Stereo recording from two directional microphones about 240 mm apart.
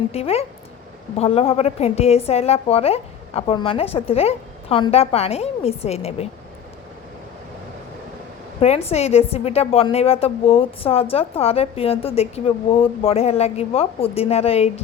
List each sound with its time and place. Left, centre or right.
0.1 s a woman's voice: left
8.6 s a woman's voice: left